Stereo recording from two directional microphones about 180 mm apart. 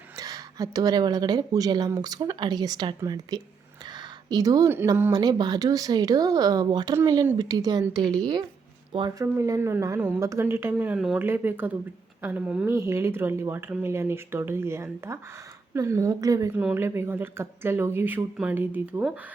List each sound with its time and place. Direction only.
0.2 s speech: 20° right (ahead or behind)